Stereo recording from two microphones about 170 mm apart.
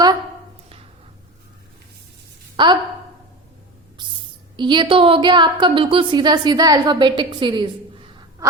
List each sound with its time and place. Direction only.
2.6 s a woman's voice: 30° right (ahead or behind)
4.5 s a woman's voice: 25° right (ahead or behind)